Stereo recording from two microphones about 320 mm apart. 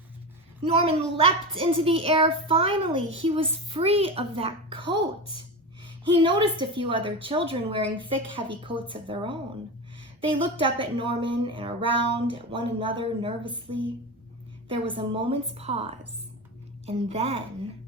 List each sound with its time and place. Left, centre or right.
0.6 s speech: centre
14.7 s a woman's voice: centre